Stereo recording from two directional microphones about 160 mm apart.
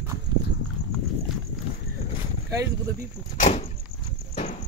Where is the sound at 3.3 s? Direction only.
45° left (ahead or behind).